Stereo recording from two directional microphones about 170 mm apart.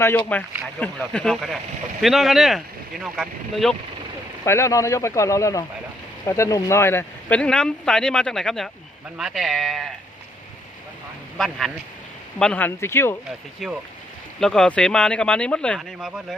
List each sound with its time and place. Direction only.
0.3 s speech: 10° left (ahead or behind)
4.4 s speech: 15° left (ahead or behind); by 9.9 s centre (ahead or behind)
11.3 s speech: centre (ahead or behind)
13.6 s speech: centre (ahead or behind)